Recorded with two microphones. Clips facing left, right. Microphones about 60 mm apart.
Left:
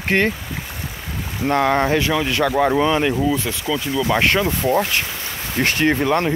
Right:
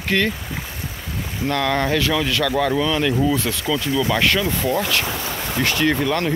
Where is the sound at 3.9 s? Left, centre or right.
Left.